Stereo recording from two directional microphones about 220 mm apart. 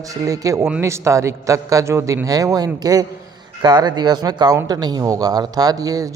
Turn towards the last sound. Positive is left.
turn(degrees=-15)  # may be behind; listen again after turning